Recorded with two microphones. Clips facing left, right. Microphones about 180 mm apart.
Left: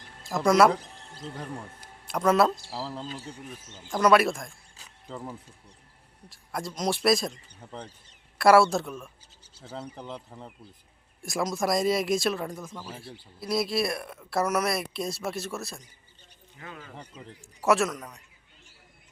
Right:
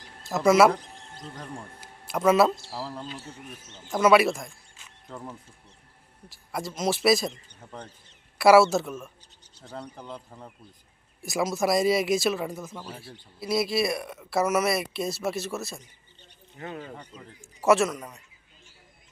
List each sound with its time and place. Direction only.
0.2 s speech: 5° right (ahead or behind)
16.6 s speech: 35° right (ahead or behind)
17.6 s speech: centre (ahead or behind)